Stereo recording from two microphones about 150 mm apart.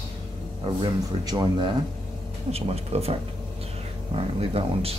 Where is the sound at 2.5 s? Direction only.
40° right (ahead or behind).